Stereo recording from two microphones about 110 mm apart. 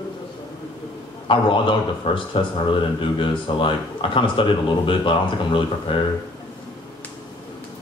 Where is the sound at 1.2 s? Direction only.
50° left (ahead or behind).